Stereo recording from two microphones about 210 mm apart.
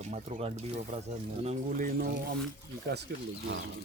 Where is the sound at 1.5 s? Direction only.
40° right (ahead or behind).